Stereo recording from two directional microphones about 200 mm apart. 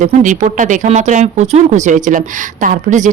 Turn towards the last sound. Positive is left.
turn(degrees=-40)  # may be behind; listen again after turning